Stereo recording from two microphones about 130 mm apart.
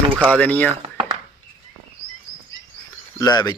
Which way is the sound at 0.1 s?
10° right (ahead or behind).